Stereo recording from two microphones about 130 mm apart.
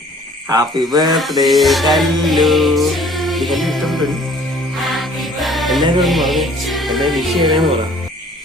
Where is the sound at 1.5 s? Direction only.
Centre (ahead or behind).